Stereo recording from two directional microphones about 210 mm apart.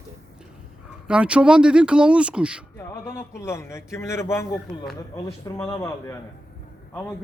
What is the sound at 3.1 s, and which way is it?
Speech, 10° left (ahead or behind).